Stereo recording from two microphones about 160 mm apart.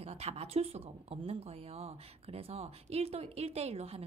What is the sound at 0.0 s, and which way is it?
Speech, 40° right (ahead or behind).